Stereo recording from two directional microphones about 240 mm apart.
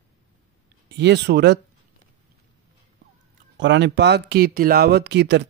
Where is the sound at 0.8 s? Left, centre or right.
Right.